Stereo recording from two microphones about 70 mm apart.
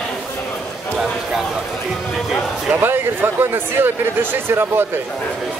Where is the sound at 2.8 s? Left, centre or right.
Right.